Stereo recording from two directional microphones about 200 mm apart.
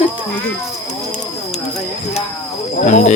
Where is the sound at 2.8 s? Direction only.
35° left (ahead or behind).